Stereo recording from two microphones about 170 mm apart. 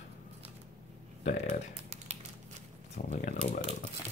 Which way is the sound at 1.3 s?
45° left (ahead or behind).